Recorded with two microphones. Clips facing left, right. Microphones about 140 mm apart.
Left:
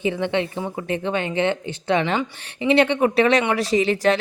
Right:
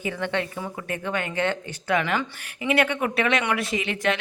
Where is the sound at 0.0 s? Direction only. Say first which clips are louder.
Left 5 dB; 20° left (ahead or behind).